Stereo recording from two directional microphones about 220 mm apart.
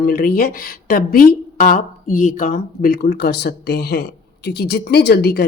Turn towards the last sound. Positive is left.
turn(degrees=45)  # may be behind; listen again after turning